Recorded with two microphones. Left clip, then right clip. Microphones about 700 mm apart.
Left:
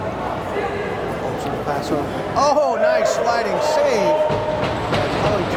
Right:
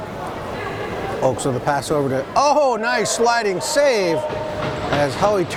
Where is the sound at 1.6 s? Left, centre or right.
Right.